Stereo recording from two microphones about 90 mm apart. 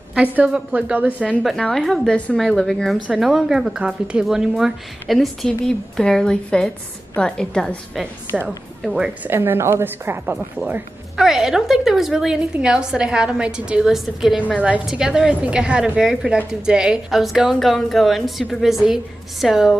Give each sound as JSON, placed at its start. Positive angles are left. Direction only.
{"t": 0.1, "sound": "a woman's voice", "side_deg": -15}
{"t": 1.4, "sound": "a woman's voice", "side_deg": 5}
{"t": 9.2, "sound": "a woman's voice", "side_deg": -25}
{"t": 11.1, "sound": "a woman's voice", "side_deg": -5}